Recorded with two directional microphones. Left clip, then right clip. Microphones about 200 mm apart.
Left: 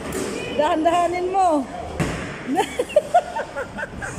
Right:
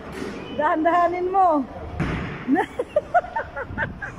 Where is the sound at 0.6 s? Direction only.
5° left (ahead or behind).